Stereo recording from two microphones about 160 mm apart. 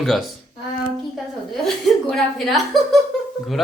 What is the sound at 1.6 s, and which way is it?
Speech, centre (ahead or behind).